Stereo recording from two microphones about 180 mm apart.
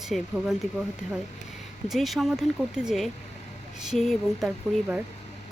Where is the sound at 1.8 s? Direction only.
Centre (ahead or behind).